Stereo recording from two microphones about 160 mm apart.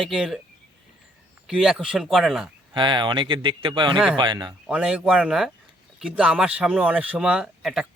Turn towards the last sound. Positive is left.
turn(degrees=-5)  # may be behind; listen again after turning